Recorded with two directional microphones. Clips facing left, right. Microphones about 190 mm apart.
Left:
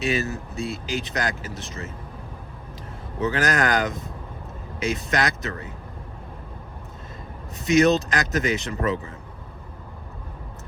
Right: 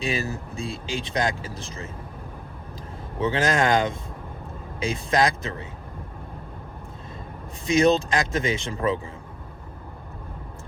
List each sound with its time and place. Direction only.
0.0 s speech: 30° right (ahead or behind)
3.2 s speech: 25° right (ahead or behind)
7.6 s speech: 30° right (ahead or behind)